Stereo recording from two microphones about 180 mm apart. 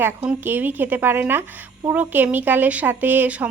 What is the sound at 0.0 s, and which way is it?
A woman's voice, 10° right (ahead or behind).